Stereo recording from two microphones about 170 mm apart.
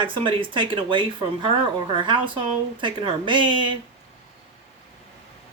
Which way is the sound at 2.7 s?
30° right (ahead or behind).